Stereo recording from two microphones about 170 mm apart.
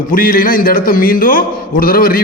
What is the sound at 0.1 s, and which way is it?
A man's voice, 55° left (ahead or behind).